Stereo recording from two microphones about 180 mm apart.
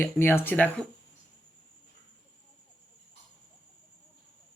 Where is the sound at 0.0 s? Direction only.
10° left (ahead or behind).